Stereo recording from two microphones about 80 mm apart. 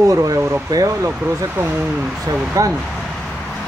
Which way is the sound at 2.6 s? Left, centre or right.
Right.